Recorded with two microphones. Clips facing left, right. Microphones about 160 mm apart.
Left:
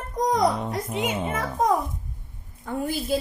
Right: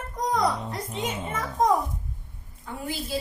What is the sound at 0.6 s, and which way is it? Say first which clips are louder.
Music: left 5 dB; 70° left (ahead or behind).